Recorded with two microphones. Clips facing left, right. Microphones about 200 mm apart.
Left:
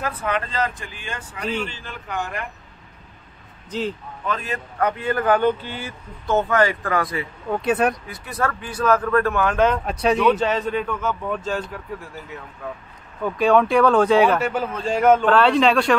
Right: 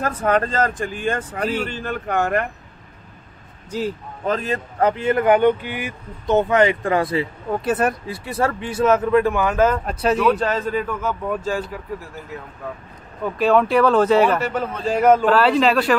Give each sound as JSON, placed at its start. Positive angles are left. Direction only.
{"t": 0.0, "sound": "a man's voice", "side_deg": -45}
{"t": 4.3, "sound": "speech", "side_deg": -35}
{"t": 7.5, "sound": "a man's voice", "side_deg": -5}
{"t": 8.1, "sound": "a man's voice", "side_deg": -30}